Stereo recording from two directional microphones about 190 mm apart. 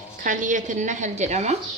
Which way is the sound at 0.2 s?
40° right (ahead or behind).